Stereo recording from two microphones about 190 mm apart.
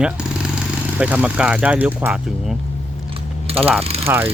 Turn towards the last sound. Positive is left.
turn(degrees=-30)  # may be behind; listen again after turning